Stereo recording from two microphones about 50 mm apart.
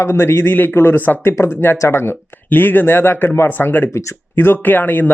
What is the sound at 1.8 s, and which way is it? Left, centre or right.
Speech, left.